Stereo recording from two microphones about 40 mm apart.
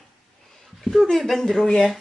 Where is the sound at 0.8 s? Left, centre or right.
Centre.